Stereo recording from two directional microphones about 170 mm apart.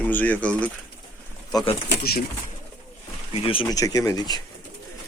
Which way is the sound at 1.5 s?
30° left (ahead or behind).